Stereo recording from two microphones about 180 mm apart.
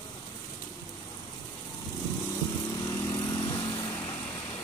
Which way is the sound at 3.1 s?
20° left (ahead or behind).